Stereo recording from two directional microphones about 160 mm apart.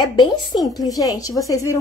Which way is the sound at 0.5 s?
35° left (ahead or behind).